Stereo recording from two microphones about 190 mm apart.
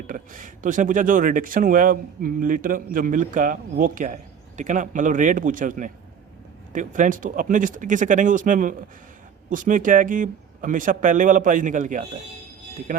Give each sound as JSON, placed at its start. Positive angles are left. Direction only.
{"t": 0.1, "sound": "speech", "side_deg": -45}